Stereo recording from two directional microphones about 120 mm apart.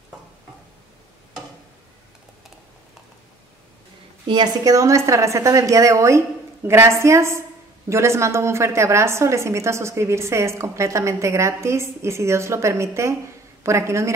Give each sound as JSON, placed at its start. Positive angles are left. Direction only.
{"t": 4.3, "sound": "a woman's voice", "side_deg": -35}